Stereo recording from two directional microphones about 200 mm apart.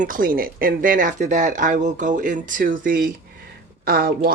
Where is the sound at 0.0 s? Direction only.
45° right (ahead or behind).